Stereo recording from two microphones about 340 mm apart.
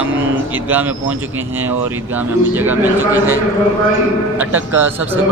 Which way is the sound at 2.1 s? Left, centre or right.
Centre.